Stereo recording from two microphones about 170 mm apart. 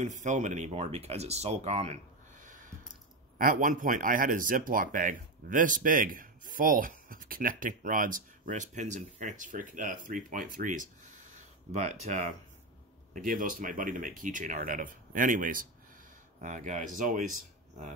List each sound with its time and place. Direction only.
0.0 s speech: 45° right (ahead or behind)